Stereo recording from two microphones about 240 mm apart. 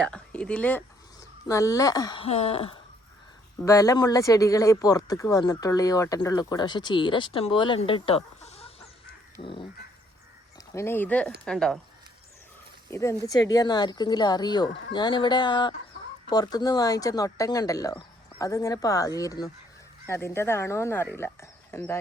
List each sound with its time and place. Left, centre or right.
0.0 s speech: centre; by 8.7 s left
9.4 s a sound: left
10.8 s speech: centre
12.9 s speech: centre
14.9 s a sound: centre
16.3 s speech: centre